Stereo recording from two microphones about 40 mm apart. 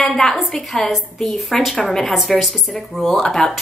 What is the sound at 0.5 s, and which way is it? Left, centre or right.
A woman's voice, centre.